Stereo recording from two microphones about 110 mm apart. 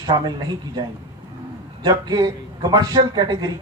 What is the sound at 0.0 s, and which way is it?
A man's voice, 40° right (ahead or behind).